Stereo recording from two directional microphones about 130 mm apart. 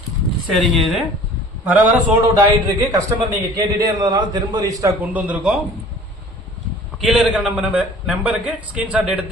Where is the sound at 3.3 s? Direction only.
30° right (ahead or behind).